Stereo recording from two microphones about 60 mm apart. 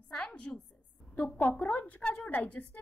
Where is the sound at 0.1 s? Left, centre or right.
Centre.